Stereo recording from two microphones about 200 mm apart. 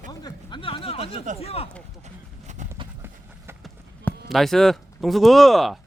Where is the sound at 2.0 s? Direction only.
35° right (ahead or behind).